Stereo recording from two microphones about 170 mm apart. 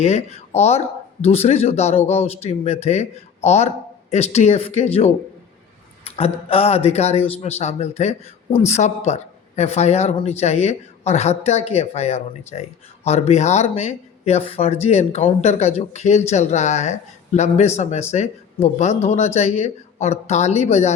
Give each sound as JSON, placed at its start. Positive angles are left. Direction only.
{"t": 0.0, "sound": "speech", "side_deg": 40}